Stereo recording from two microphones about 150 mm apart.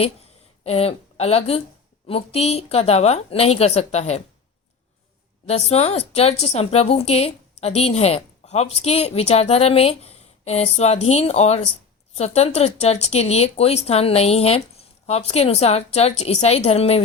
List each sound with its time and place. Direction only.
0.0 s a woman's voice: 40° left (ahead or behind)
5.5 s a woman's voice: 45° left (ahead or behind)